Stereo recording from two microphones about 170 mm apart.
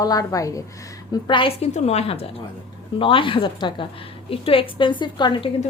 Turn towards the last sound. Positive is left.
turn(degrees=25)  # may be behind; listen again after turning